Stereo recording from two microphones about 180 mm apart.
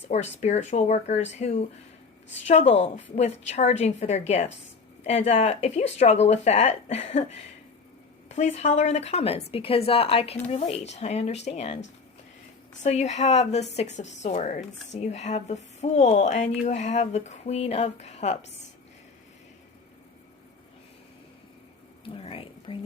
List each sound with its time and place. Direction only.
0.1 s a woman's voice: 40° left (ahead or behind)
12.8 s a woman's voice: 40° left (ahead or behind)
22.1 s speech: 30° left (ahead or behind)